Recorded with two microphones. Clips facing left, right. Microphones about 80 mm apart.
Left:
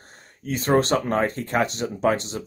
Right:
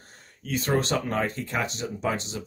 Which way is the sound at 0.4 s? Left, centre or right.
Left.